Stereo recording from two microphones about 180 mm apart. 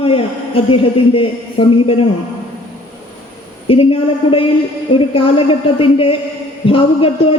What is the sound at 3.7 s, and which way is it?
Music, 30° left (ahead or behind).